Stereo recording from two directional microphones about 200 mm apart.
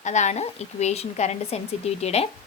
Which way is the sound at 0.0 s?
35° left (ahead or behind).